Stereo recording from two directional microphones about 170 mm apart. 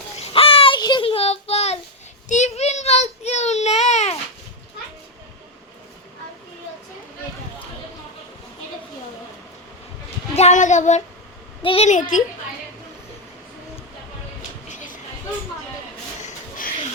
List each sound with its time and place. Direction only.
0.2 s child singing: 35° left (ahead or behind)
2.3 s baby cry: 40° left (ahead or behind)
10.3 s child singing: 45° left (ahead or behind)
11.6 s a woman's voice: 35° left (ahead or behind)
14.7 s a sound: 50° left (ahead or behind)
16.2 s a sound: 50° left (ahead or behind)